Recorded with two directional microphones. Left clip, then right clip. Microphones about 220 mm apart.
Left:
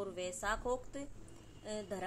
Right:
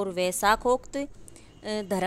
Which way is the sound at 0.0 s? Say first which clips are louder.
Right 15 dB; 45° right (ahead or behind).